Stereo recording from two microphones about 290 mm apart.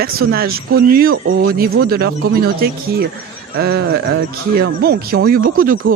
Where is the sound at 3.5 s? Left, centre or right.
Right.